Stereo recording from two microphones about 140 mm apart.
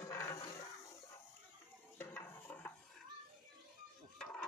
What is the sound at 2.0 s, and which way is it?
Cutlery, 15° left (ahead or behind).